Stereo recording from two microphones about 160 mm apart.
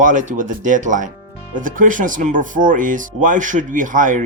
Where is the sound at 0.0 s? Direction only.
50° right (ahead or behind).